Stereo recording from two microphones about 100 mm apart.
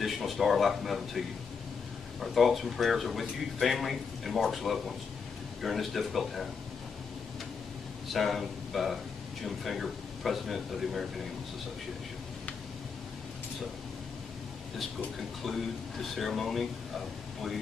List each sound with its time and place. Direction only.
0.0 s speech: centre (ahead or behind)
8.1 s speech: centre (ahead or behind)
15.4 s speech: centre (ahead or behind)